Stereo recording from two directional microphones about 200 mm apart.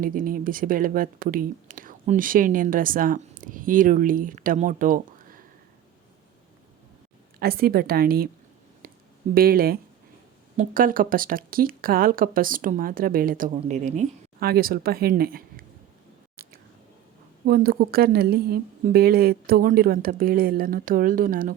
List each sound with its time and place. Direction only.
0.0 s speech: 45° right (ahead or behind)
7.3 s speech: 50° right (ahead or behind)
9.3 s speech: 50° right (ahead or behind)
17.4 s speech: 50° right (ahead or behind)